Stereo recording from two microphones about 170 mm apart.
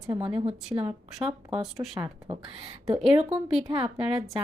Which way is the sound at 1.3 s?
5° right (ahead or behind).